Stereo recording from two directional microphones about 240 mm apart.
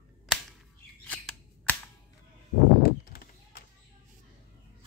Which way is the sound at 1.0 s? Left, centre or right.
Centre.